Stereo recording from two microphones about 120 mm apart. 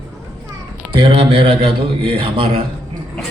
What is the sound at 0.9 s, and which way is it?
A man's voice, 50° right (ahead or behind).